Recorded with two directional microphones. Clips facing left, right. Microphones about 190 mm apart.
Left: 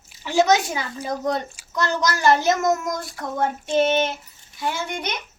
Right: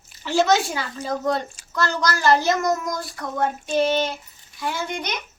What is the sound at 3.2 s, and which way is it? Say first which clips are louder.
Child singing: even; 25° left (ahead or behind).